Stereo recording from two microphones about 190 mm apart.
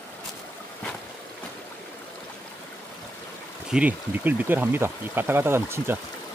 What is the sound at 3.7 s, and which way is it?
Speech, 5° right (ahead or behind).